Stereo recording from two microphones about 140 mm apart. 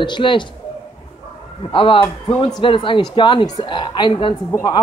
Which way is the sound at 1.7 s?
40° left (ahead or behind).